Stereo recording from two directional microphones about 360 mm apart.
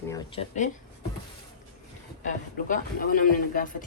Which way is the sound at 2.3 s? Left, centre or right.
Left.